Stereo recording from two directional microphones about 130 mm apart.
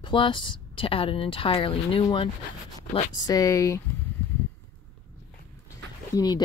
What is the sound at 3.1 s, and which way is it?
Speech, 25° left (ahead or behind).